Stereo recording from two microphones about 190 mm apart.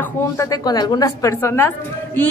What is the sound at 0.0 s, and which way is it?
A woman's voice, 15° left (ahead or behind).